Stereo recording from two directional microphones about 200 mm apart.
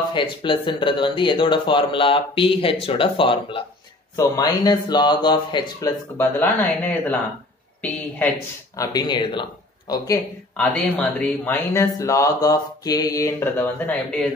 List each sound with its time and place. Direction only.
0.1 s a man's voice: 25° left (ahead or behind); by 7.2 s 10° left (ahead or behind)
8.7 s speech: 20° left (ahead or behind)
10.6 s a man's voice: 5° left (ahead or behind)